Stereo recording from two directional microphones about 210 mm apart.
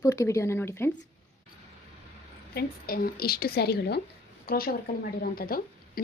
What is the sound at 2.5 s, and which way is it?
A woman's voice, 45° left (ahead or behind).